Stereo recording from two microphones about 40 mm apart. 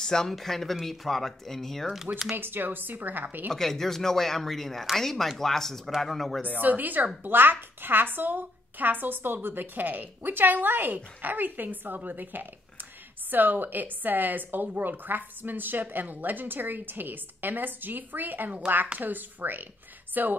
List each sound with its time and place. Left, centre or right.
0.0 s speech: centre
2.3 s a woman's voice: right
3.5 s speech: centre
6.4 s a woman's voice: right
7.2 s a woman's voice: right